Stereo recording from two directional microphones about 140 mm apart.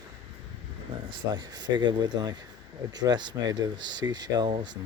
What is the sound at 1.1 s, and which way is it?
Speech, 30° right (ahead or behind).